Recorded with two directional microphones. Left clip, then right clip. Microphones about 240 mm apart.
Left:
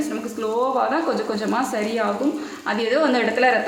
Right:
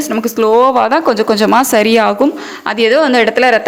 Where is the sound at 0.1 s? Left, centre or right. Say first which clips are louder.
Right 14 dB; right.